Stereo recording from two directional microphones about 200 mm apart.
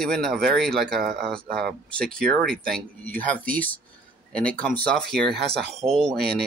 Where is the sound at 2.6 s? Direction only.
5° left (ahead or behind).